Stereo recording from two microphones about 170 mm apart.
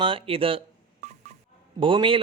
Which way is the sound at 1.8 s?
30° right (ahead or behind).